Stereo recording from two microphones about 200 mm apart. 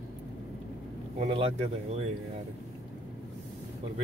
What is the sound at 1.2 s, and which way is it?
Speech, 30° right (ahead or behind).